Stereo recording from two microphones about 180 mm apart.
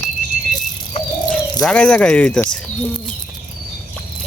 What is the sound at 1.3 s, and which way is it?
Speech, 5° left (ahead or behind).